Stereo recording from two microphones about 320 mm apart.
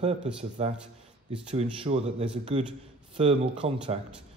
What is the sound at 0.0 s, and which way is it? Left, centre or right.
Speech, centre.